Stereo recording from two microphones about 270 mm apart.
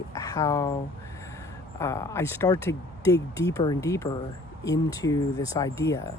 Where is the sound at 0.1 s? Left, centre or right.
Centre.